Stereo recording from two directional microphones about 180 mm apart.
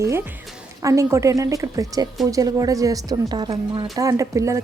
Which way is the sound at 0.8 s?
15° right (ahead or behind).